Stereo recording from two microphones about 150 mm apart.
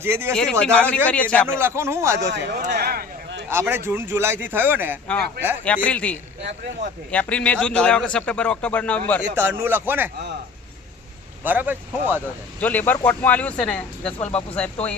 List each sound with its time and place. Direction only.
0.0 s speech: 15° right (ahead or behind)
0.6 s a man's voice: 10° left (ahead or behind)
1.5 s speech: 15° right (ahead or behind)
2.3 s speech: 90° right
3.5 s speech: 15° right (ahead or behind)
5.6 s a man's voice: 10° left (ahead or behind)
9.4 s speech: 15° right (ahead or behind)
11.4 s speech: 10° right (ahead or behind)
12.5 s a man's voice: 10° left (ahead or behind)